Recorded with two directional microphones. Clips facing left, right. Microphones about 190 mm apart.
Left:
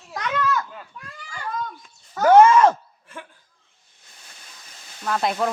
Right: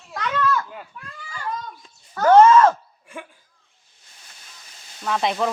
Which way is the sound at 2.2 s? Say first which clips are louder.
Even; 10° left (ahead or behind).